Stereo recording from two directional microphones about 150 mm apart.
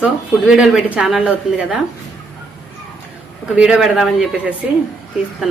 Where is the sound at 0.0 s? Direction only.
5° right (ahead or behind).